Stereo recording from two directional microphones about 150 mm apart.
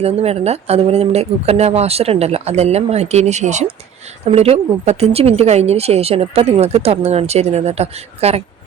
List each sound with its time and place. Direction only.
0.0 s speech: 45° right (ahead or behind)